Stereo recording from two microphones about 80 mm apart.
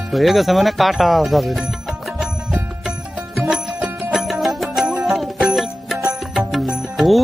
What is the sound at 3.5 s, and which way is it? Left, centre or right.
Music, centre.